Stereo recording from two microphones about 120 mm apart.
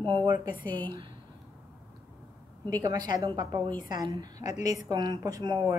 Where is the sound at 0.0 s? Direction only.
40° right (ahead or behind).